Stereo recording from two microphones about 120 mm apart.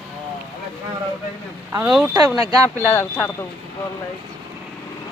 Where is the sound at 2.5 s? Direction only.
30° right (ahead or behind).